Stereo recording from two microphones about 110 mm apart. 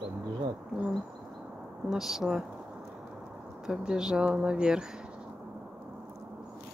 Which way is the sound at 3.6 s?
5° right (ahead or behind).